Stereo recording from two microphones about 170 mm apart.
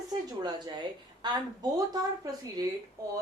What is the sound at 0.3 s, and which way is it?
A woman's voice, 25° right (ahead or behind).